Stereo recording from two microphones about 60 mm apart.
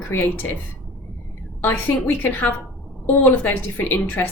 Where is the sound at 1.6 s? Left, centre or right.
Left.